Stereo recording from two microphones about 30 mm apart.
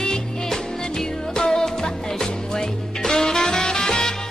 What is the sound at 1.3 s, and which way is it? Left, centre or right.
Music, left.